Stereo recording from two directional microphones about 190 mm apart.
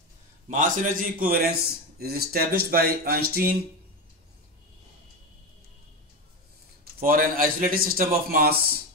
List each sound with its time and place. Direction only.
0.5 s a man's voice: 45° right (ahead or behind)
6.8 s a man's voice: 50° right (ahead or behind)